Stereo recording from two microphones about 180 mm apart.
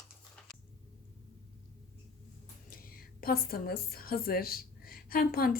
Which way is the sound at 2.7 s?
55° left (ahead or behind).